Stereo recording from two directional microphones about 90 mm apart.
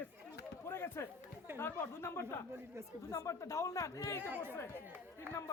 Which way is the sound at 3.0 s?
40° left (ahead or behind).